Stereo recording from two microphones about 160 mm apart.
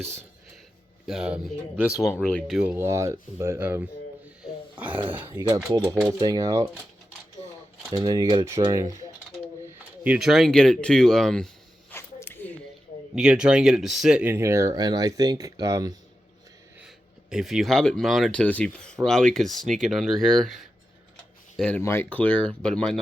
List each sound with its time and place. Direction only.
1.0 s speech: 5° right (ahead or behind)
2.6 s speech: 10° right (ahead or behind)
4.7 s a sound: 10° right (ahead or behind)
5.1 s speech: 15° right (ahead or behind)
7.9 s speech: 25° right (ahead or behind)
10.0 s speech: 5° right (ahead or behind)
11.9 s a sound: 15° left (ahead or behind)
13.1 s speech: 5° right (ahead or behind); by 16.0 s 20° right (ahead or behind)
16.8 s speech: 5° right (ahead or behind)
21.5 s a sound: 5° left (ahead or behind)
21.8 s speech: 15° left (ahead or behind)